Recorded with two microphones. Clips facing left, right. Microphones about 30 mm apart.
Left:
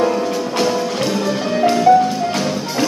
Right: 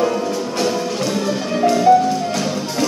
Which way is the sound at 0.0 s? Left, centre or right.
Left.